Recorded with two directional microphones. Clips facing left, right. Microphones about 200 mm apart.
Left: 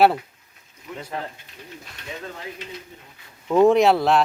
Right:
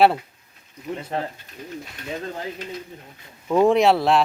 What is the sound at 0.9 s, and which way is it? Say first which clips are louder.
Speech: right 5 dB; 35° right (ahead or behind).